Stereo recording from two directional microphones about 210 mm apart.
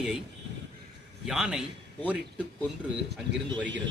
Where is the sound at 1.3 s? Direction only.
Centre (ahead or behind).